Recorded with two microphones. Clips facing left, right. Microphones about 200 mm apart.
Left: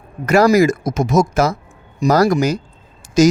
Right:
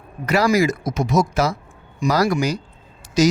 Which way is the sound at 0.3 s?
45° left (ahead or behind).